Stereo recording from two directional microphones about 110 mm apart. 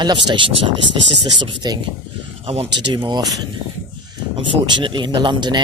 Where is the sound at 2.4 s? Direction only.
65° right (ahead or behind).